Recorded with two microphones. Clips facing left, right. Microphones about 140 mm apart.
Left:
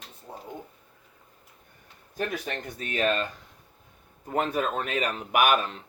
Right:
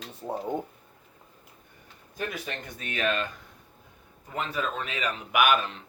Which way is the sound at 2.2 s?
40° left (ahead or behind).